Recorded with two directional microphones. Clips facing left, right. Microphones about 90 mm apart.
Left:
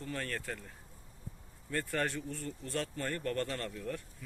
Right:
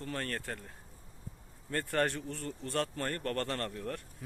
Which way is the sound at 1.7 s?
50° right (ahead or behind).